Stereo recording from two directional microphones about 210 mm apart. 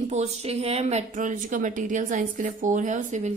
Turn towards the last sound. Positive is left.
turn(degrees=-35)  # may be behind; listen again after turning